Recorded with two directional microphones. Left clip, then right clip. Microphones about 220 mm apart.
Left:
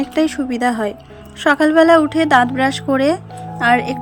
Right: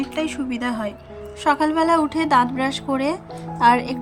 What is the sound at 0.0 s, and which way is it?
A woman's voice, 20° left (ahead or behind).